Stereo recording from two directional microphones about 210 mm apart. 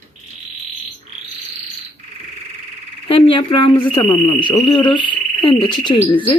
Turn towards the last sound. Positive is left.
turn(degrees=25)  # may be behind; listen again after turning